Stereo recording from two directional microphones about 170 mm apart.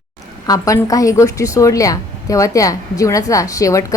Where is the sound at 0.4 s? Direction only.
20° left (ahead or behind).